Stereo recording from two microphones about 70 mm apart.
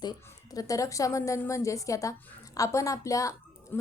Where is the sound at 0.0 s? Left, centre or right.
Left.